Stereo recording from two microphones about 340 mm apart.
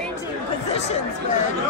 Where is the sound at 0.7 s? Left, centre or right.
Centre.